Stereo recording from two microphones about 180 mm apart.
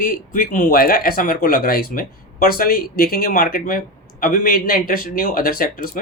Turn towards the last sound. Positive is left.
turn(degrees=50)  # may be behind; listen again after turning